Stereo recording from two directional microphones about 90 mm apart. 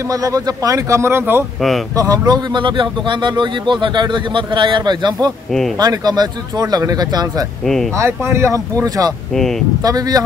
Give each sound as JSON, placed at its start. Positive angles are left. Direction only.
{"t": 0.1, "sound": "speech", "side_deg": -40}
{"t": 2.0, "sound": "speech", "side_deg": -40}
{"t": 2.5, "sound": "speech", "side_deg": -65}
{"t": 7.6, "sound": "speech", "side_deg": 5}
{"t": 8.0, "sound": "speech", "side_deg": -30}
{"t": 8.8, "sound": "speech", "side_deg": -45}
{"t": 9.3, "sound": "speech", "side_deg": 5}
{"t": 9.8, "sound": "speech", "side_deg": -45}